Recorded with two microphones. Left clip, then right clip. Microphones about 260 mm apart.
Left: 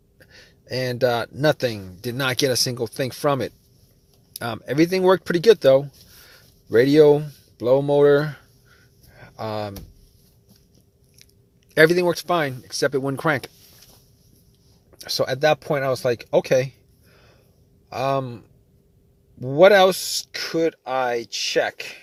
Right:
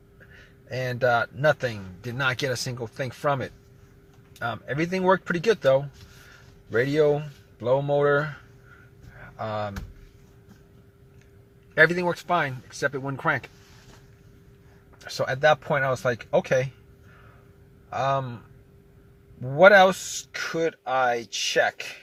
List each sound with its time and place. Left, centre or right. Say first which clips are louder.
0.3 s speech: left 5 dB; left
9.1 s a sound: left 2 dB; left
11.7 s speech: left 4 dB; left
15.0 s speech: left 2 dB; left
17.8 s speech: left 2 dB; left
19.4 s speech: left 2 dB; left